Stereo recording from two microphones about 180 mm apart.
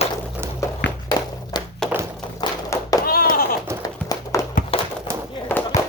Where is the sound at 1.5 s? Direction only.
25° left (ahead or behind).